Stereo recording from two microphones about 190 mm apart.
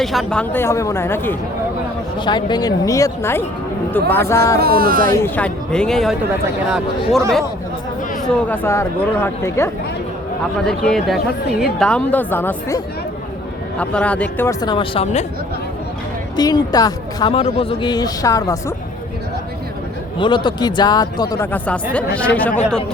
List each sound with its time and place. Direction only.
0.0 s speech: centre (ahead or behind)
2.1 s speech: 25° left (ahead or behind)
4.6 s speech: 50° right (ahead or behind)
5.1 s speech: 10° left (ahead or behind)
8.4 s speech: 15° left (ahead or behind)
10.7 s speech: centre (ahead or behind)
14.6 s speech: 25° left (ahead or behind)
16.3 s speech: 20° left (ahead or behind)
20.1 s speech: 25° left (ahead or behind); by 22.8 s 5° left (ahead or behind)